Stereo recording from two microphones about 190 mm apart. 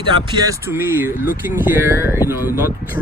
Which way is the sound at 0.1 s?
20° right (ahead or behind).